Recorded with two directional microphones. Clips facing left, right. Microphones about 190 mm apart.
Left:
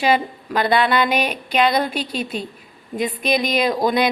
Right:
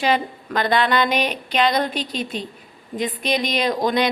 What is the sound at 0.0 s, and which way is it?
Speech, 10° left (ahead or behind).